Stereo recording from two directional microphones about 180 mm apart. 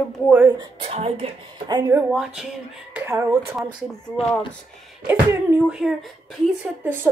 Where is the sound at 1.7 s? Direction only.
20° right (ahead or behind).